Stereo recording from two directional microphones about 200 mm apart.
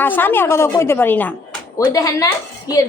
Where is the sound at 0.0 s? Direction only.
10° left (ahead or behind).